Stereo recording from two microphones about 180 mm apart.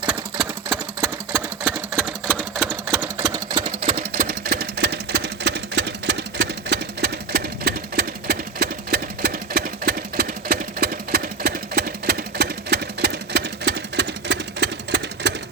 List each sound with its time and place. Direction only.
0.1 s sewing machine: centre (ahead or behind)
2.0 s sewing machine: 5° right (ahead or behind)
3.3 s engine: 25° right (ahead or behind)
3.9 s sewing machine: 55° right (ahead or behind); by 15.3 s 70° right (ahead or behind)